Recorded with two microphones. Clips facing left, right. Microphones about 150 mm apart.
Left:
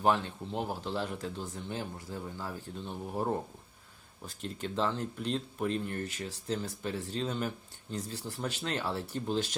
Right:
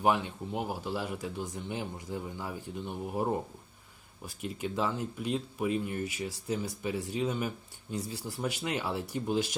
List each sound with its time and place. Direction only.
0.0 s speech: 15° right (ahead or behind)